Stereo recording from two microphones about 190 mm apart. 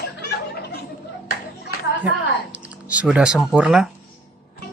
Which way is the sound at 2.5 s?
5° right (ahead or behind).